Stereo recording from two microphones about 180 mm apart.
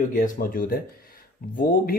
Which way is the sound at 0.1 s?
50° left (ahead or behind).